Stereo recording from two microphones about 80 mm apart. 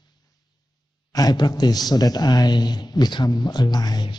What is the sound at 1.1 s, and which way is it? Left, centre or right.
A man's voice, left.